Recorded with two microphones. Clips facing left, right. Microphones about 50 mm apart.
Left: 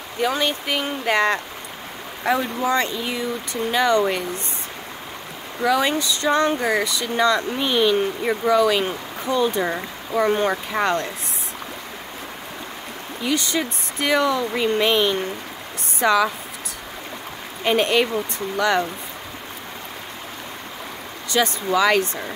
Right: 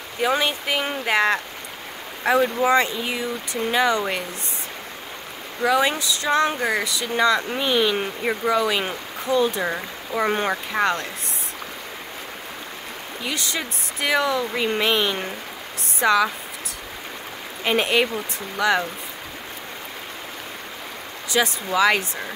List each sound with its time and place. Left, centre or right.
0.2 s speech: centre
5.6 s speech: centre
8.0 s speech: centre
10.2 s speech: centre
10.5 s speech: centre
13.2 s speech: centre
17.6 s speech: centre
21.3 s speech: centre